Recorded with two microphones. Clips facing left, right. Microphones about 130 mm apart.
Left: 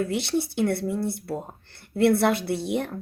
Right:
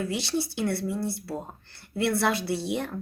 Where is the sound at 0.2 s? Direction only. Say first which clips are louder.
Left 4 dB; 55° left (ahead or behind).